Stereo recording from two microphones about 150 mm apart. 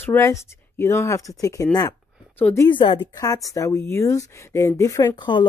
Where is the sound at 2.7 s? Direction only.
35° left (ahead or behind).